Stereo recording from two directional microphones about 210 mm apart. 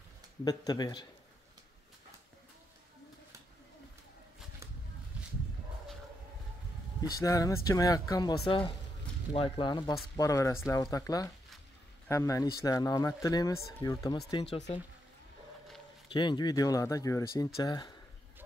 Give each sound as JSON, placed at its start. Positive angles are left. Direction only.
{"t": 0.5, "sound": "speech", "side_deg": 20}
{"t": 7.1, "sound": "speech", "side_deg": 15}
{"t": 16.1, "sound": "speech", "side_deg": 20}